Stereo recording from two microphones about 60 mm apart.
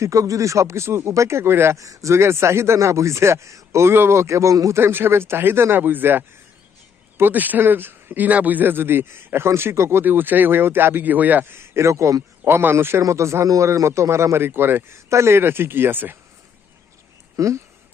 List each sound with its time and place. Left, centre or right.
0.0 s speech: right
1.7 s speech: right
2.1 s a man's voice: right
4.7 s a man's voice: right
10.0 s a man's voice: right
12.5 s a man's voice: right
13.0 s a man's voice: right
17.3 s speech: right